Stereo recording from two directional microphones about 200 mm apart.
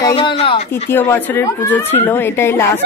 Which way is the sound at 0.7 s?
10° left (ahead or behind).